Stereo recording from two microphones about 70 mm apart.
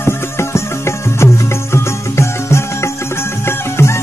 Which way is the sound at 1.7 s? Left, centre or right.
Left.